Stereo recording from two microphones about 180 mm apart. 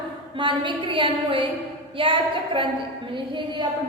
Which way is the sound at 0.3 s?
25° right (ahead or behind).